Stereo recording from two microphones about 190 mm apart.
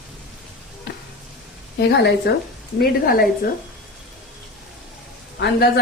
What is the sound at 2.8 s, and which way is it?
Speech, 50° left (ahead or behind).